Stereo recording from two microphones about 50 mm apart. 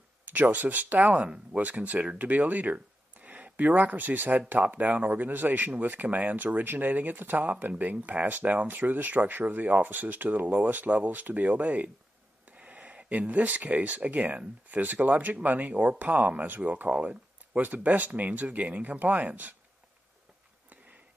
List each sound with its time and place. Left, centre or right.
0.2 s speech: right